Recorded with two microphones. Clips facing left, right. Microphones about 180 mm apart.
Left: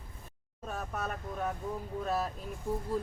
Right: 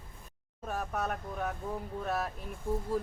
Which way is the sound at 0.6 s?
Centre (ahead or behind).